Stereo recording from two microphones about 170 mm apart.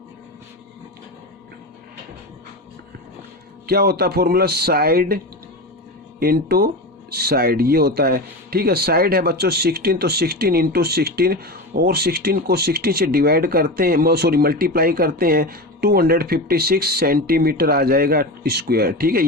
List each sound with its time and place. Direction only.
3.7 s a man's voice: 65° right (ahead or behind)